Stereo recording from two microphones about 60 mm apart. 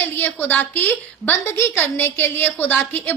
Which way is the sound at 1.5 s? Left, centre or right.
Left.